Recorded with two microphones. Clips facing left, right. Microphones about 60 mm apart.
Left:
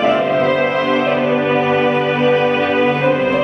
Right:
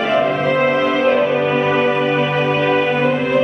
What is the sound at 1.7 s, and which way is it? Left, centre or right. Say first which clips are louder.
Music: left 1 dB; centre.